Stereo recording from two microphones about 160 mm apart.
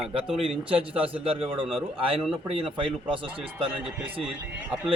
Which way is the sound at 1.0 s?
35° right (ahead or behind).